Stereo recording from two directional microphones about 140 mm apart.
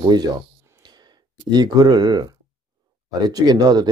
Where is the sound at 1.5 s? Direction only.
30° right (ahead or behind).